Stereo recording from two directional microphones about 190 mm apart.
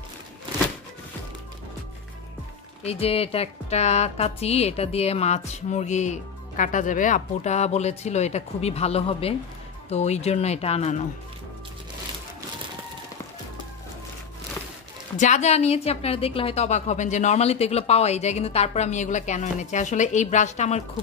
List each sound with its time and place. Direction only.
2.8 s music: 30° left (ahead or behind)
15.1 s music: 40° left (ahead or behind)